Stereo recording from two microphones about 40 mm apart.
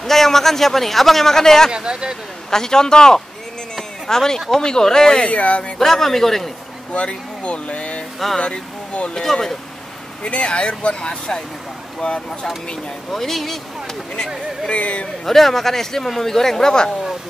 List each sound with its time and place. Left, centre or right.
0.0 s speech: centre
1.7 s speech: right
2.5 s speech: centre
5.3 s speech: left
5.8 s speech: centre
6.9 s speech: left
9.1 s speech: centre
10.2 s speech: left
13.1 s speech: centre
14.7 s speech: left
15.2 s speech: centre